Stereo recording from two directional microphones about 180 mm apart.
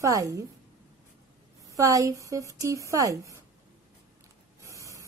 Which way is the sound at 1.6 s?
20° right (ahead or behind).